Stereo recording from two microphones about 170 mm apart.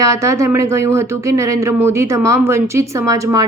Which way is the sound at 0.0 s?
20° right (ahead or behind).